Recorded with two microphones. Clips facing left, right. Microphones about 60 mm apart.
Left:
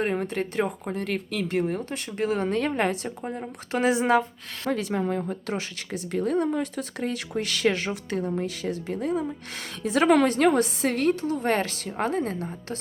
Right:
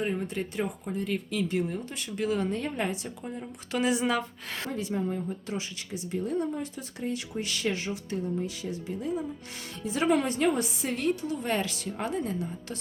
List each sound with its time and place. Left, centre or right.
0.0 s speech: left
2.5 s speech: left
3.4 s speech: left
4.7 s speech: left